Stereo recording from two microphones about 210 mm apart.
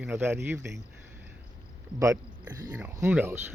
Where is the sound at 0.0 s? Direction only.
10° right (ahead or behind).